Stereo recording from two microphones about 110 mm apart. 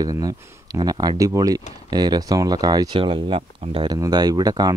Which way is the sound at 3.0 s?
55° right (ahead or behind).